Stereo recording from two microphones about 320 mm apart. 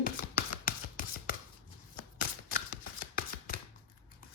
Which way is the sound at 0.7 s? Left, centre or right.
Left.